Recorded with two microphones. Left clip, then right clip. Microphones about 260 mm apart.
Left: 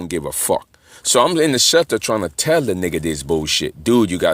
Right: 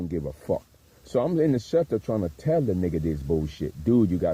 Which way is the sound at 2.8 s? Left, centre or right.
Left.